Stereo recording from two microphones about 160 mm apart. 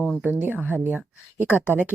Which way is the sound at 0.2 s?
10° right (ahead or behind).